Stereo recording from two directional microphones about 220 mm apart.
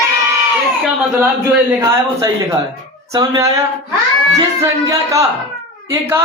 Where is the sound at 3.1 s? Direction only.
15° right (ahead or behind).